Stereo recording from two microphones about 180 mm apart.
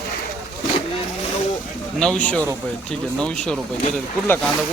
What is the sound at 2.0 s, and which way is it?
Speech, 5° left (ahead or behind).